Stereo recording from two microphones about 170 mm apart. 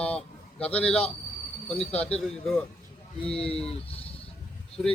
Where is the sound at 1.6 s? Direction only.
35° left (ahead or behind).